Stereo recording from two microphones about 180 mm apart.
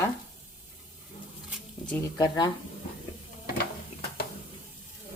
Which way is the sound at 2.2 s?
20° left (ahead or behind).